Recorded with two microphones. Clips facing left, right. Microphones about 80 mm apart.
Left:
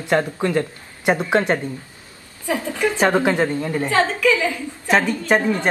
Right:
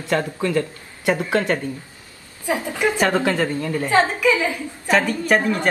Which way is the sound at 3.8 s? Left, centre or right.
Right.